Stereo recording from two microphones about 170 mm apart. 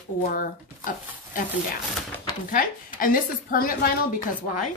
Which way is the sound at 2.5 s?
55° left (ahead or behind).